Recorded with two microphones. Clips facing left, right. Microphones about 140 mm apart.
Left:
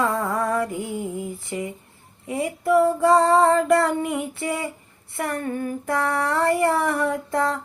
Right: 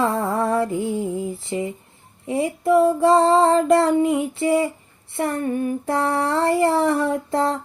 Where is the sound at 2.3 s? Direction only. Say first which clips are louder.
Right 2 dB; 25° right (ahead or behind).